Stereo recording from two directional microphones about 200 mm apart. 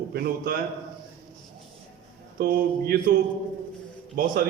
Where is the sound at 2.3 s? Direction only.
50° right (ahead or behind).